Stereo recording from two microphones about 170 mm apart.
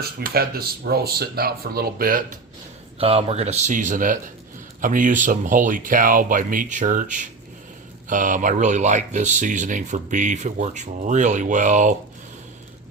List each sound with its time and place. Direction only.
0.0 s speech: 65° right (ahead or behind)
3.0 s speech: 35° right (ahead or behind)